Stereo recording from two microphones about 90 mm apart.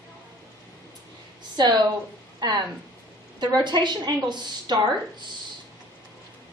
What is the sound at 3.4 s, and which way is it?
A woman's voice, 55° right (ahead or behind).